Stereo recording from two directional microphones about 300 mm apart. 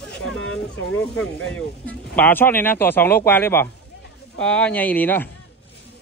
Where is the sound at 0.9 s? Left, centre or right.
Centre.